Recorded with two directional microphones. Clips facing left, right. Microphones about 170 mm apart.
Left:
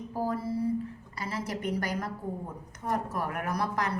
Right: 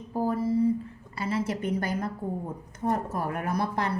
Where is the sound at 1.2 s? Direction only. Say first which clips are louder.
Right 5 dB; 25° right (ahead or behind).